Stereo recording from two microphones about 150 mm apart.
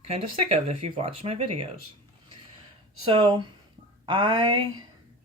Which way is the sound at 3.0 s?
35° right (ahead or behind).